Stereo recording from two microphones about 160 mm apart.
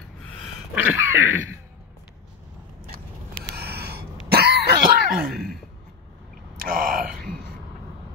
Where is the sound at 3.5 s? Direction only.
85° right; by 5.4 s 65° right (ahead or behind).